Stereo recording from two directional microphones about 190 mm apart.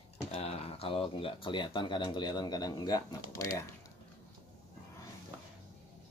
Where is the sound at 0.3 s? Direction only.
35° left (ahead or behind); by 3.6 s 15° left (ahead or behind).